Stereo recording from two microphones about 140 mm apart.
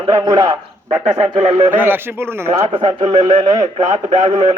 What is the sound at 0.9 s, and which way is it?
Speech, 50° right (ahead or behind).